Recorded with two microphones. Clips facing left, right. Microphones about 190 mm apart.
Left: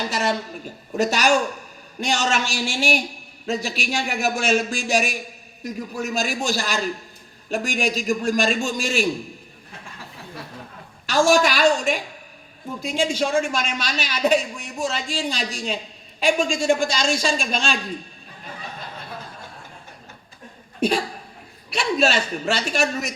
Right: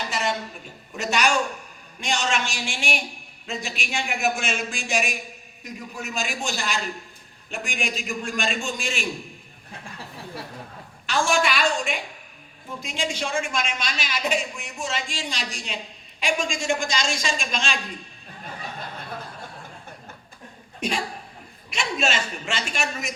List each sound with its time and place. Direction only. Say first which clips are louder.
0.1 s a woman's voice: left 3 dB; 40° left (ahead or behind)
11.0 s a man's voice: left 6 dB; 40° left (ahead or behind)
21.7 s a man's voice: left 6 dB; 35° left (ahead or behind)